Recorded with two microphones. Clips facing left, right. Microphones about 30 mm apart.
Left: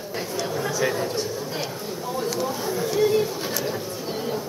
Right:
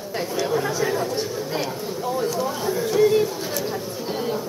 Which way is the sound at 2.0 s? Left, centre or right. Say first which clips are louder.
Right 3 dB; centre.